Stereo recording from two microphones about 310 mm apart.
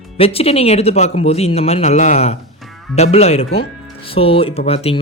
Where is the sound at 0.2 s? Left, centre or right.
Centre.